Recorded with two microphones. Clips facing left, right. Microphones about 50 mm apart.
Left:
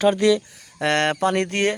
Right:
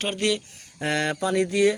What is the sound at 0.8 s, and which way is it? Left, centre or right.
Mantra, left.